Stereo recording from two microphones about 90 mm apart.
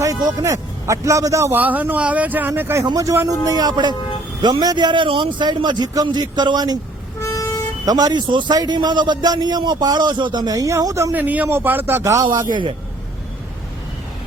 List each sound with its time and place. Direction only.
0.0 s a man's voice: 45° right (ahead or behind)
1.5 s a man's voice: 20° right (ahead or behind)
3.4 s a man's voice: 45° right (ahead or behind)
7.2 s vehicle: 35° left (ahead or behind)
7.9 s a man's voice: 50° right (ahead or behind)
11.1 s a man's voice: 20° right (ahead or behind)
12.2 s a man's voice: 50° right (ahead or behind)